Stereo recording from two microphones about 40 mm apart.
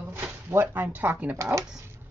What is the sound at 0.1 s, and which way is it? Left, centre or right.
Speech, right.